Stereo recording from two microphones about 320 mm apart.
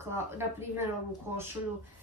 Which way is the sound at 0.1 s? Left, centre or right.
Centre.